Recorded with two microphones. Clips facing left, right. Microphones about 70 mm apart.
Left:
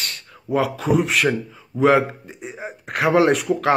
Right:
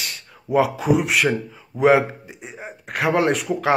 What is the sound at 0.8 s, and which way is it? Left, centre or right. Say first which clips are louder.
A man's voice: even; centre.